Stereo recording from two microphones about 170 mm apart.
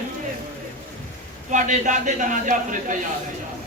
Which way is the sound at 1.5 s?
45° right (ahead or behind).